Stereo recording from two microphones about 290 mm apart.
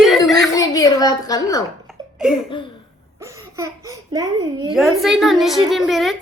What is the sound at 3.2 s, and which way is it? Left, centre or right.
Speech, centre.